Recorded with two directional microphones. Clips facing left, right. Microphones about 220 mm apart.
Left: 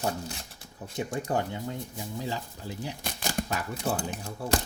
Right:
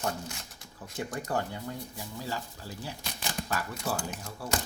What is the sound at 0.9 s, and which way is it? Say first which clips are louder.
Speech: left 3 dB; 20° left (ahead or behind).